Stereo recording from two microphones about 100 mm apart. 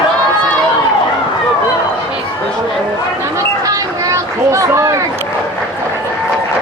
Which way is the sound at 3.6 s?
35° right (ahead or behind).